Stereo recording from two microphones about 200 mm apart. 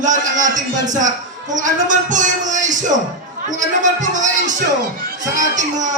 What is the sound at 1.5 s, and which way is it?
Speech, 40° right (ahead or behind).